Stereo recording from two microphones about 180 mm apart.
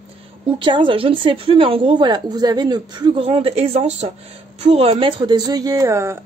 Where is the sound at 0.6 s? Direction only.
25° right (ahead or behind).